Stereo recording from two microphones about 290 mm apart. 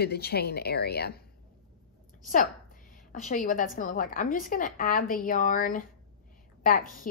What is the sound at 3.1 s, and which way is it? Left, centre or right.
A woman's voice, left.